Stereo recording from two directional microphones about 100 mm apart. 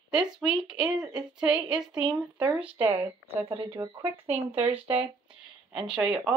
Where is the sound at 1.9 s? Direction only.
50° right (ahead or behind).